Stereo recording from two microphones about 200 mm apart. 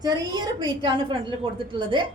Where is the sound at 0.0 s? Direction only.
20° right (ahead or behind).